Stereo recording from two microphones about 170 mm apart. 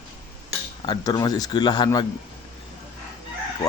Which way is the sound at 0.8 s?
20° left (ahead or behind).